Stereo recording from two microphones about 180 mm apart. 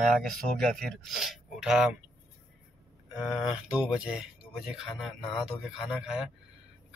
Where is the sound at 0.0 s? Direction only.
Centre (ahead or behind).